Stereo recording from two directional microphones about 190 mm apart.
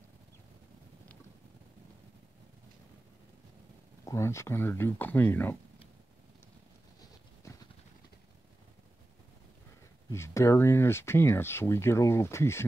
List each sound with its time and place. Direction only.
4.0 s speech: 15° left (ahead or behind)
7.4 s a sound: 15° left (ahead or behind)
10.1 s speech: 15° left (ahead or behind)